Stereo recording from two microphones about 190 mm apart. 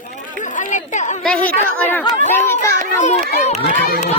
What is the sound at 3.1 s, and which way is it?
Speech, 35° left (ahead or behind).